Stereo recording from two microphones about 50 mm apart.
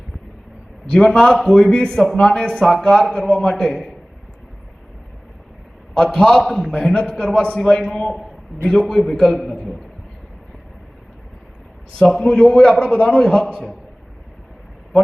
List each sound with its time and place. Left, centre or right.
0.9 s a man's voice: centre
5.9 s a man's voice: centre
11.9 s a man's voice: centre
13.2 s a man's voice: centre